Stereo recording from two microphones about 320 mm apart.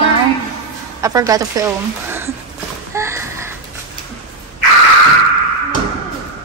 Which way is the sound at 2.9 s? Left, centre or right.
Centre.